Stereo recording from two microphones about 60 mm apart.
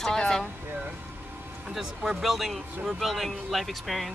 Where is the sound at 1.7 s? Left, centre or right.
Centre.